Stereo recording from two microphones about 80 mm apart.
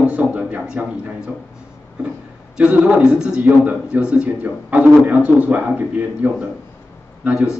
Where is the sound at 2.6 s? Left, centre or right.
Centre.